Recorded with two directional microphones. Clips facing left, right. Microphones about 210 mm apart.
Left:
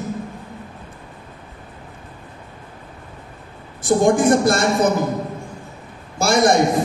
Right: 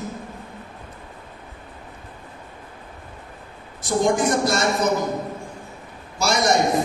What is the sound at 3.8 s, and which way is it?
A man's voice, 50° left (ahead or behind).